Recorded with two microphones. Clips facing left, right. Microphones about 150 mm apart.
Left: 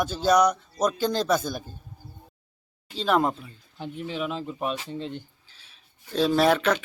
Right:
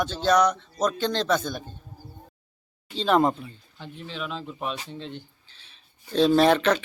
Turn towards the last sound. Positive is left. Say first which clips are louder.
# right 2 dB
turn(degrees=5)  # may be behind; listen again after turning